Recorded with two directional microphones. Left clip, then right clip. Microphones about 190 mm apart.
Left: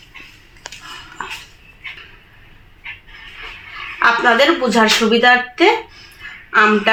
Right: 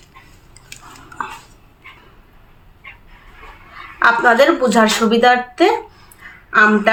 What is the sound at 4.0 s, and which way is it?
Speech, 20° right (ahead or behind).